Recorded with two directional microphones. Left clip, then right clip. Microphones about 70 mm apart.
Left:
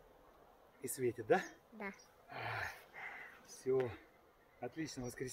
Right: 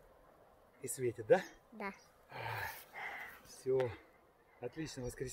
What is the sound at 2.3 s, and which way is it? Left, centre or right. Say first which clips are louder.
Dog: even; left.